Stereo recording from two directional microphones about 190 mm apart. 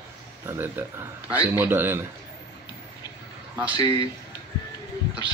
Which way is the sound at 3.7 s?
20° left (ahead or behind).